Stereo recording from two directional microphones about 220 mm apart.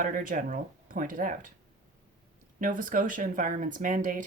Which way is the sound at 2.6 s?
35° right (ahead or behind).